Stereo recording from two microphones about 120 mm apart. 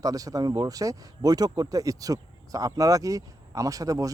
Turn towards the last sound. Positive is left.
turn(degrees=-30)  # may be behind; listen again after turning